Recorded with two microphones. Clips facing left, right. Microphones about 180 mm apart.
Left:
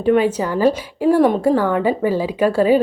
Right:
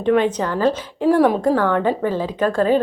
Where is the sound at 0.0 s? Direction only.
5° left (ahead or behind).